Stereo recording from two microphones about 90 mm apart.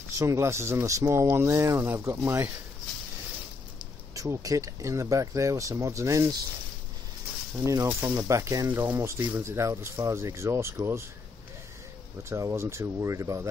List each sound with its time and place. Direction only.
0.2 s speech: 30° right (ahead or behind)
4.1 s speech: 40° right (ahead or behind)
7.5 s speech: 35° right (ahead or behind)
12.2 s speech: 30° right (ahead or behind)